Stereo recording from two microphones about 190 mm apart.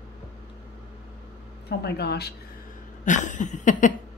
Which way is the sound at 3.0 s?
40° left (ahead or behind).